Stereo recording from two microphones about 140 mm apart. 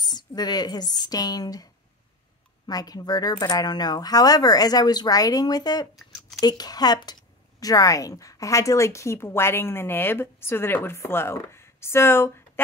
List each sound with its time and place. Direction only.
0.0 s a woman's voice: 30° left (ahead or behind)